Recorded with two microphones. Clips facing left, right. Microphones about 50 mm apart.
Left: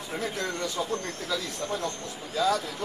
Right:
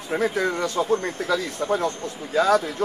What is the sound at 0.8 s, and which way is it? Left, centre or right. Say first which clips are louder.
Speech: right 9 dB; centre.